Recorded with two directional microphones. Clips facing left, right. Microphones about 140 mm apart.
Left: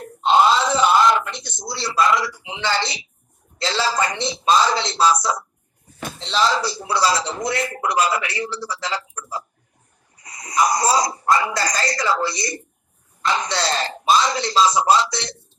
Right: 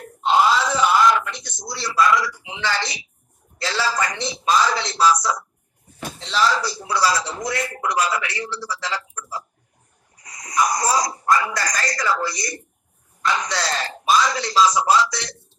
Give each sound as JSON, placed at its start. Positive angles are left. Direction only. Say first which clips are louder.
{"t": 0.0, "sound": "wail", "louder": "left 2 dB", "side_deg": 25}
{"t": 3.6, "sound": "a man's voice", "louder": "left 2 dB", "side_deg": 25}